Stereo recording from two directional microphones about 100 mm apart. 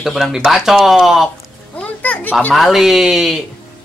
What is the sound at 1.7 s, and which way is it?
Speech, 15° left (ahead or behind).